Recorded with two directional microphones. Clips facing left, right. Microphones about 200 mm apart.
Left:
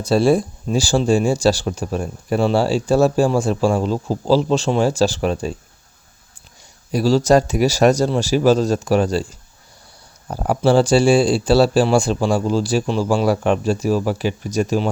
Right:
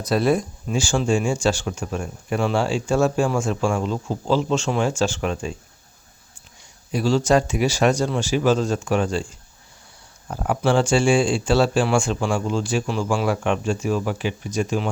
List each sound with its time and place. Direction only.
0.0 s speech: 30° left (ahead or behind)
6.9 s speech: 40° left (ahead or behind)
10.2 s speech: 35° left (ahead or behind)